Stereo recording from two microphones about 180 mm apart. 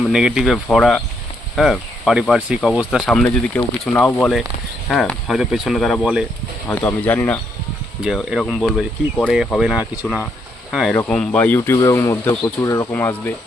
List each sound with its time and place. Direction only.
0.1 s speech: 5° right (ahead or behind)
6.7 s speech: 10° left (ahead or behind)
8.0 s speech: centre (ahead or behind)